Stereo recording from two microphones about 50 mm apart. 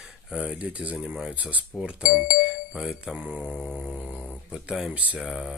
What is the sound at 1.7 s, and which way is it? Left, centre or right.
Speech, centre.